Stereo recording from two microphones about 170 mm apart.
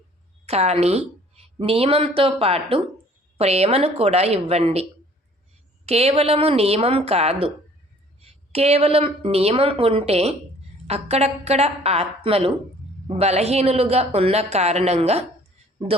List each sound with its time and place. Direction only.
0.4 s a woman's voice: 40° right (ahead or behind)